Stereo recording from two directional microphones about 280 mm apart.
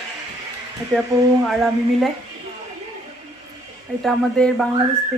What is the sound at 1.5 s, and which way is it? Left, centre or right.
Speech, centre.